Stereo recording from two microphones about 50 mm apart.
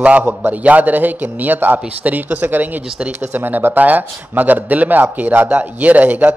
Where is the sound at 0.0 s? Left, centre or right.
Right.